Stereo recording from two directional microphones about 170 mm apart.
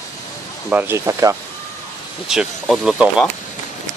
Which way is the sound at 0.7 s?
10° right (ahead or behind).